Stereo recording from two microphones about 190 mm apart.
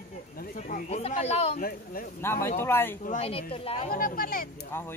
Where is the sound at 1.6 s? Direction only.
50° left (ahead or behind).